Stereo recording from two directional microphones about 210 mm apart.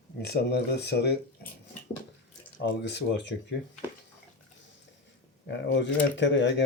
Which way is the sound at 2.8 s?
55° left (ahead or behind).